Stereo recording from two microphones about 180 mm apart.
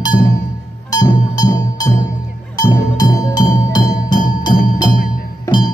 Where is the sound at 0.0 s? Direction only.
20° left (ahead or behind).